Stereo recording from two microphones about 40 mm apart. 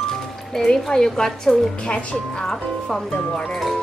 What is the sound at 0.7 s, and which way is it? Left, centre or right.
A woman's voice, centre.